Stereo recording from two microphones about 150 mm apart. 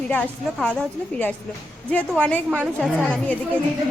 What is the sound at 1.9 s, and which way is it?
Speech, 10° left (ahead or behind).